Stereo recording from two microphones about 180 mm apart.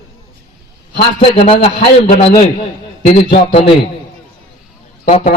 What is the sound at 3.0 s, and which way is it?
Speech, 45° left (ahead or behind).